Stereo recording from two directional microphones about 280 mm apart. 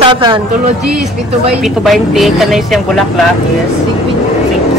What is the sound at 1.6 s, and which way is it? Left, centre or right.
A man's voice, centre.